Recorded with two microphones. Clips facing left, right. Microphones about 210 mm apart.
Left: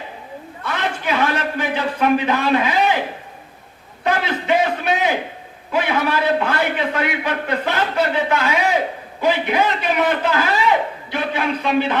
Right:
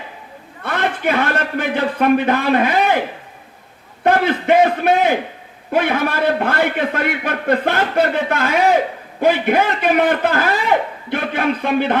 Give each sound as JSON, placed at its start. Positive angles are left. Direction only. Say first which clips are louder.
{"t": 0.6, "sound": "a man's voice", "louder": "right 4 dB", "side_deg": -55}
{"t": 4.0, "sound": "a sound", "louder": "right 5 dB", "side_deg": -55}
{"t": 5.7, "sound": "a man's voice", "louder": "right 2 dB", "side_deg": -55}